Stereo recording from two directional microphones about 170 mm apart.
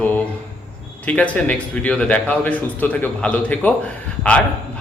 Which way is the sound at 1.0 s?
10° left (ahead or behind).